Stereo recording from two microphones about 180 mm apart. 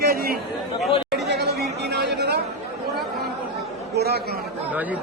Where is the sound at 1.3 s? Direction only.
65° right (ahead or behind).